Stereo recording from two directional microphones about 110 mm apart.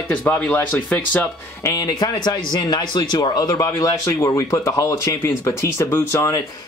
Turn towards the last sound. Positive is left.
turn(degrees=25)  # may be behind; listen again after turning